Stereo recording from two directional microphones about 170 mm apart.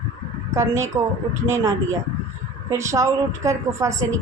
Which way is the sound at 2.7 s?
20° right (ahead or behind).